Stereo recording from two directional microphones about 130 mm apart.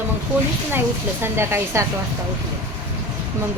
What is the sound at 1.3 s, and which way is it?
Speech, 20° right (ahead or behind).